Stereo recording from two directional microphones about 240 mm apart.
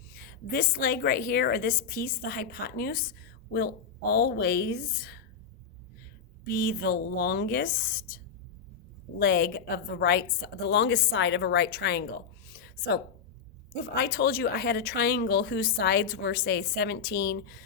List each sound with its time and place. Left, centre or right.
0.2 s speech: left
6.4 s a woman's voice: left
12.5 s a sound: left
13.9 s speech: left